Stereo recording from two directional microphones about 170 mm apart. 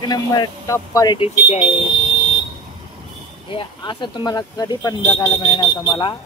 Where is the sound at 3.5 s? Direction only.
30° left (ahead or behind).